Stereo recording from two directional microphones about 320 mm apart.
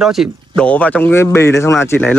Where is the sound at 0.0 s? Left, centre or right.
Centre.